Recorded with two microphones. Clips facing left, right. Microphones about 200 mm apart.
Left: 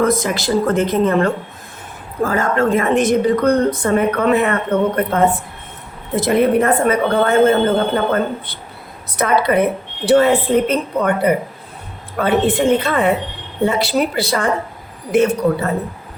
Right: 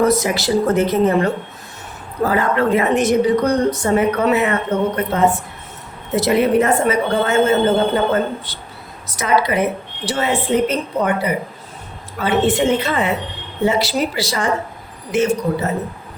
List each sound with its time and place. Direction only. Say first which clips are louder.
0.0 s a woman's voice: right 1 dB; 50° left (ahead or behind)